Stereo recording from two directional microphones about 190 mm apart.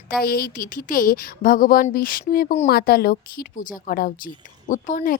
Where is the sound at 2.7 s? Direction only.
55° left (ahead or behind).